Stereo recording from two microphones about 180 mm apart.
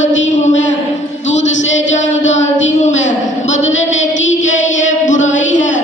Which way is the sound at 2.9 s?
40° left (ahead or behind).